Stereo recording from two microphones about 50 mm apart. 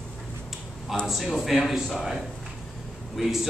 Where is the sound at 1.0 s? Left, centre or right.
Centre.